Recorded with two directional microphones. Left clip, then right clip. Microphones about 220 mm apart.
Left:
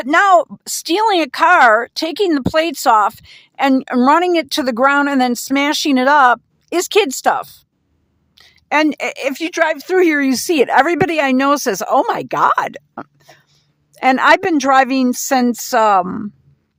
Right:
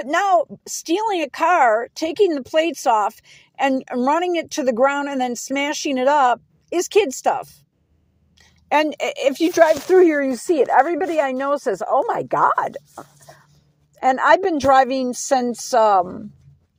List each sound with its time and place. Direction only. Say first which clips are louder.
0.0 s a woman's voice: left 6 dB; 15° left (ahead or behind)